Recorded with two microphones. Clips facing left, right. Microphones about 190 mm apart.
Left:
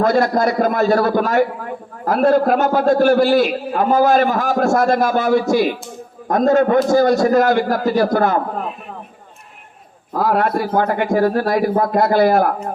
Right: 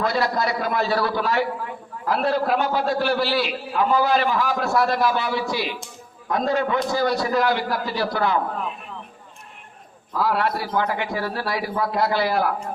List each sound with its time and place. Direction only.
0.0 s a man's voice: 45° left (ahead or behind)
10.1 s a man's voice: 45° left (ahead or behind)